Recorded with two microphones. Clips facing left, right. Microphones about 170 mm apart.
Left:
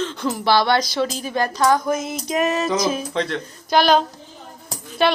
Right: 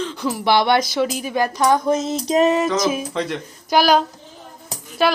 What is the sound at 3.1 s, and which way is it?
Speech, 10° right (ahead or behind).